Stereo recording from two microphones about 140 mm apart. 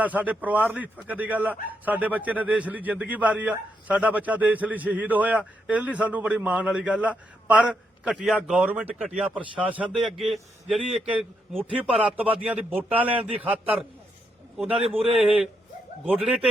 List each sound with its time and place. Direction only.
0.0 s a man's voice: 10° right (ahead or behind)
14.7 s a man's voice: 45° right (ahead or behind)